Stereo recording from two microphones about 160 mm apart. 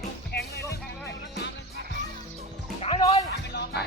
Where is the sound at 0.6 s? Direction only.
15° left (ahead or behind).